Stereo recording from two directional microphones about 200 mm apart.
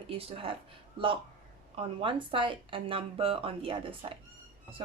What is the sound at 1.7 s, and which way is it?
Speech, 25° right (ahead or behind).